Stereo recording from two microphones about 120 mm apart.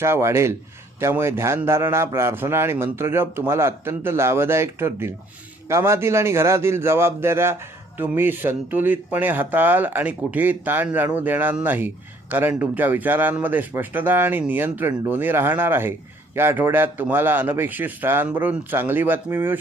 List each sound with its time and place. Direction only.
0.0 s a man's voice: 20° right (ahead or behind)